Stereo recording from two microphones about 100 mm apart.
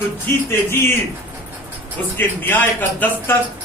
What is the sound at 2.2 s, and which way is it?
A man's voice, 20° left (ahead or behind).